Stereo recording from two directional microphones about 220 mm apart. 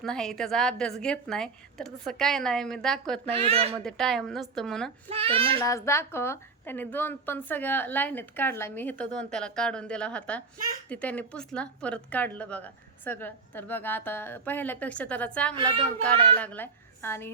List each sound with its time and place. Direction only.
0.0 s a woman's voice: centre (ahead or behind)
3.2 s a child's voice: 25° right (ahead or behind)
3.8 s a woman's voice: centre (ahead or behind)
5.0 s a child's voice: 25° right (ahead or behind)
5.6 s a woman's voice: 15° left (ahead or behind)